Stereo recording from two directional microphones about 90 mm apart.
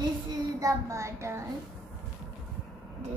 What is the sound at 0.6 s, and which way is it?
Speech, 35° right (ahead or behind).